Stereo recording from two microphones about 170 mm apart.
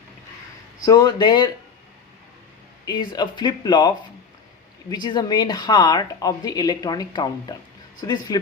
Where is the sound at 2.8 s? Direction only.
25° left (ahead or behind).